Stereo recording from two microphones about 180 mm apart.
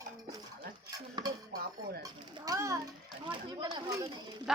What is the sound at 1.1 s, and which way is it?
Cutlery, 20° right (ahead or behind).